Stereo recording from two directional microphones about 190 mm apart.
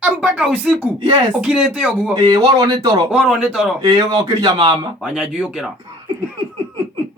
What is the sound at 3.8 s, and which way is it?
Speech, 20° right (ahead or behind).